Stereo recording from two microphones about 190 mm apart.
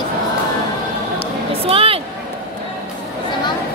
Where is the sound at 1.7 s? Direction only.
30° right (ahead or behind).